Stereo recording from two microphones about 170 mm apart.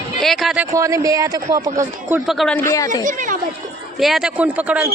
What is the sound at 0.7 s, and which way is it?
Speech, 20° right (ahead or behind).